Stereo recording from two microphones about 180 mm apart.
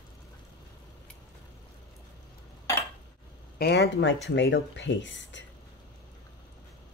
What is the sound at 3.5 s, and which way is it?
Speech, 65° left (ahead or behind).